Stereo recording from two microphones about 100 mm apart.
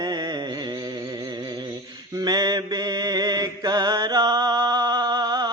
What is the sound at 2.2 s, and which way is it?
Mantra, 40° right (ahead or behind).